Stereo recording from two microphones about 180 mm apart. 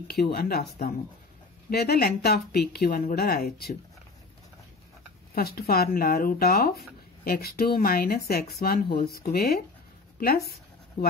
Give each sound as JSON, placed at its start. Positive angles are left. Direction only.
{"t": 0.1, "sound": "speech", "side_deg": 60}
{"t": 5.3, "sound": "speech", "side_deg": 60}
{"t": 10.1, "sound": "writing", "side_deg": 55}